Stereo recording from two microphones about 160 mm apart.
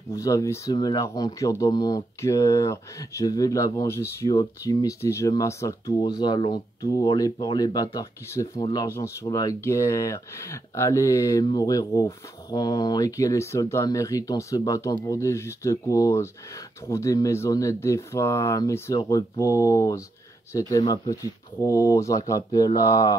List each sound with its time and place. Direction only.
0.1 s speech: 20° left (ahead or behind)